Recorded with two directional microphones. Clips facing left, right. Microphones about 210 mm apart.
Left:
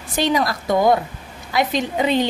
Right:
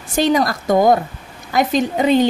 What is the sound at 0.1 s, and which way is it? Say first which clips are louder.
A woman's voice: right 4 dB; 45° right (ahead or behind).